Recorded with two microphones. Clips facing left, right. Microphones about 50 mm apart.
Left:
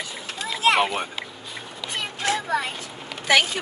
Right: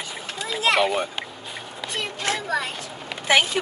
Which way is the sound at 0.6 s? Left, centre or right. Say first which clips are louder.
Even; left.